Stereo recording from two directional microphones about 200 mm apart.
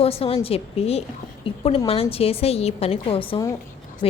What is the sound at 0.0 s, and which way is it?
A woman's voice, 30° left (ahead or behind).